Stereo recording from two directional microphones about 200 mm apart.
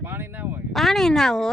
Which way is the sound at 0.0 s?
10° right (ahead or behind).